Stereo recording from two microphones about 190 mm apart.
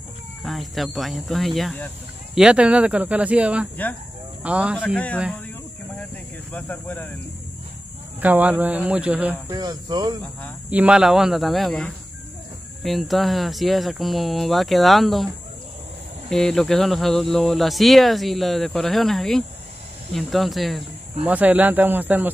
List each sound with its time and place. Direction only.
0.4 s speech: centre (ahead or behind)
4.9 s speech: 5° left (ahead or behind)
6.5 s speech: 10° left (ahead or behind)
8.2 s speech: 10° right (ahead or behind)
9.5 s speech: 20° right (ahead or behind)
10.7 s speech: 5° right (ahead or behind)
16.3 s speech: centre (ahead or behind)